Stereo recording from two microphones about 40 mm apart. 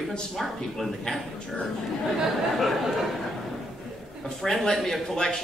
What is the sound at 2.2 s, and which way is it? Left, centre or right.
Speech, centre.